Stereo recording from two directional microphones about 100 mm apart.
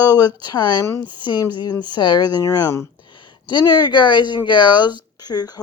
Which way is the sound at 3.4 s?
50° left (ahead or behind).